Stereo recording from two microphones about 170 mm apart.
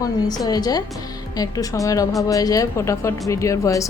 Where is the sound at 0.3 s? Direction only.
25° left (ahead or behind).